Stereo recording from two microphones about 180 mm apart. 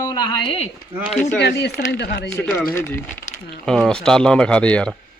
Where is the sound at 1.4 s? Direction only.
65° left (ahead or behind).